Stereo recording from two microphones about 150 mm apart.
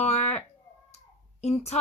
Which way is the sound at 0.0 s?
50° left (ahead or behind).